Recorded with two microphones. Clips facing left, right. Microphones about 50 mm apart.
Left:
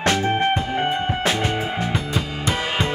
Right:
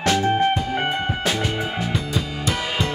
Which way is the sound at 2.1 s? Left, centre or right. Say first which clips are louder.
Left 1 dB; left.